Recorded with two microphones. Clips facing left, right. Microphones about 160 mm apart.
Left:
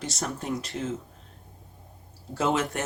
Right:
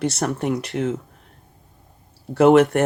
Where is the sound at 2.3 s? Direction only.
65° right (ahead or behind).